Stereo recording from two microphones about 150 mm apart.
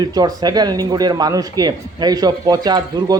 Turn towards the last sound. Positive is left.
turn(degrees=-25)  # may be behind; listen again after turning